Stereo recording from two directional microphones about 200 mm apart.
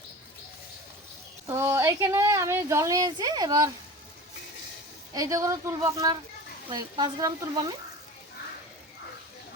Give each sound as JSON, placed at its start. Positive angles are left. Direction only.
{"t": 1.5, "sound": "a woman's voice", "side_deg": -15}
{"t": 5.1, "sound": "a woman's voice", "side_deg": -15}